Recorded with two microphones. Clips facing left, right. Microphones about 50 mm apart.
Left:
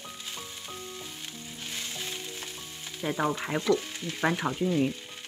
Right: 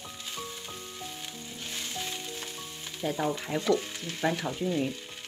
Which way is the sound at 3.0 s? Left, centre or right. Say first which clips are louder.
Left 1 dB; left.